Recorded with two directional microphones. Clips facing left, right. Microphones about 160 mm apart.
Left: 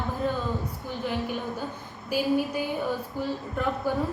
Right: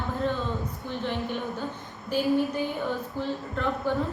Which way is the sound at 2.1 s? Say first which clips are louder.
Right 1 dB; 10° left (ahead or behind).